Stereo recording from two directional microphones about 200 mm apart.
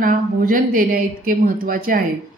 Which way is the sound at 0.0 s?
45° right (ahead or behind).